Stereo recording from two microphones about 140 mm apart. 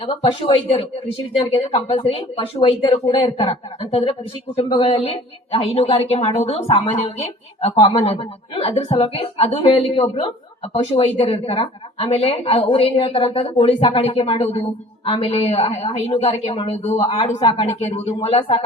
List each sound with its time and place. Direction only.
0.0 s a woman's voice: 40° left (ahead or behind)